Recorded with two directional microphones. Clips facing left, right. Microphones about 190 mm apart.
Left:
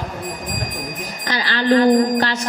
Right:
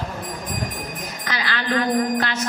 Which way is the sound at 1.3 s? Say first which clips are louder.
Left 8 dB; 35° left (ahead or behind).